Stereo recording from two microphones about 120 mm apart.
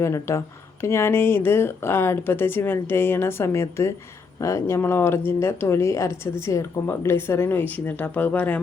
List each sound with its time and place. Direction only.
0.0 s speech: 25° left (ahead or behind)